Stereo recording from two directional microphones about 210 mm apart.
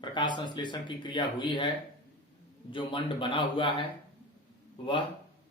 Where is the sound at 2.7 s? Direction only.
20° left (ahead or behind).